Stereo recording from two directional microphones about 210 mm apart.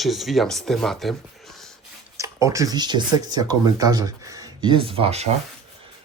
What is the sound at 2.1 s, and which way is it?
Speech, 15° right (ahead or behind).